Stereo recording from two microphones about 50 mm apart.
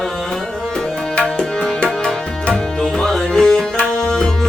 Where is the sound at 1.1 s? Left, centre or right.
Left.